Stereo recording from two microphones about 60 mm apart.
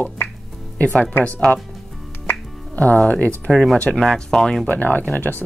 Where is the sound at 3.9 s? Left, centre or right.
Centre.